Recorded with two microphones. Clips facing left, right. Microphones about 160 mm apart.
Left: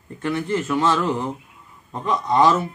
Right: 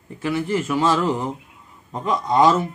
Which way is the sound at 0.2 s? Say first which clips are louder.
Right 1 dB; 5° right (ahead or behind).